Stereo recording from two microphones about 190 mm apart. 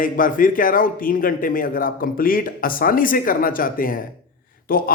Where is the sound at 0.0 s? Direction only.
45° left (ahead or behind).